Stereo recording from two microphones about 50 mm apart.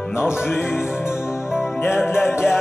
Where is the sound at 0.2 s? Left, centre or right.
Left.